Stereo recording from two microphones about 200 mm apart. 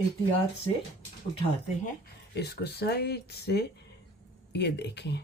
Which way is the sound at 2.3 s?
55° left (ahead or behind).